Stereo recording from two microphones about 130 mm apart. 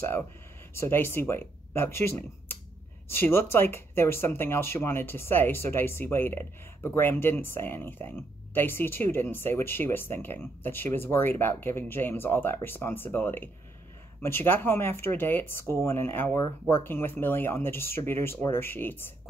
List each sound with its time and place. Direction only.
0.7 s speech: 20° left (ahead or behind)